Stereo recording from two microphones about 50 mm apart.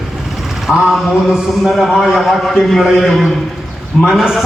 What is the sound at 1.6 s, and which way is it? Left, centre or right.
A man's voice, centre.